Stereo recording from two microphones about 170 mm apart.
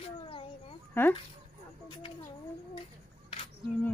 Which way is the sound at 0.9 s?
10° left (ahead or behind).